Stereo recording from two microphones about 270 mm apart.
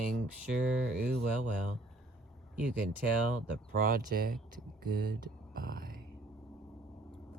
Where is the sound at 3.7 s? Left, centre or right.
Right.